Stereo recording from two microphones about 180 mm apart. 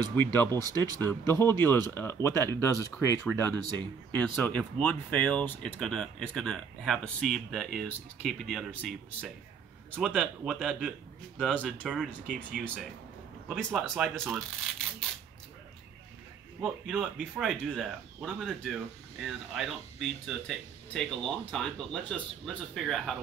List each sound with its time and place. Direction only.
0.1 s speech: 10° left (ahead or behind)
0.7 s speech: 20° right (ahead or behind)
1.0 s speech: 15° left (ahead or behind); by 14.4 s 5° right (ahead or behind)
16.6 s speech: 5° right (ahead or behind)